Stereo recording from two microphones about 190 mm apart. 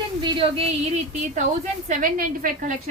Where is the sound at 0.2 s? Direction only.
30° right (ahead or behind).